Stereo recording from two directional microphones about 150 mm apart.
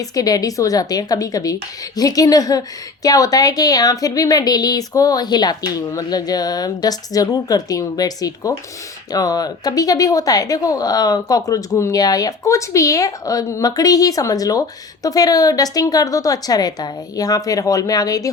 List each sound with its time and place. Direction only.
0.0 s a woman's voice: 25° left (ahead or behind)